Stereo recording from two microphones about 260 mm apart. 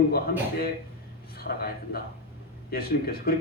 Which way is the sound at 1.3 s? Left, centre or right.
Left.